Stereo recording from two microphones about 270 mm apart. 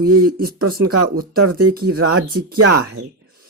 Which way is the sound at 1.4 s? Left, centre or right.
Right.